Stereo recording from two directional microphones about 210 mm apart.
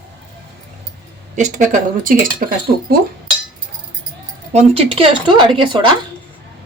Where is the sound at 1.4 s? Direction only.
35° right (ahead or behind).